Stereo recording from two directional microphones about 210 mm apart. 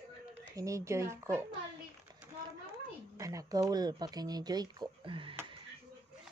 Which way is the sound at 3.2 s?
15° right (ahead or behind).